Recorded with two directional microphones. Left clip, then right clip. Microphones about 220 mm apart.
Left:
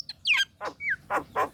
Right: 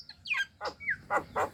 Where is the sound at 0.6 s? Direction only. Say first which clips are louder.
Left 4 dB; 25° left (ahead or behind).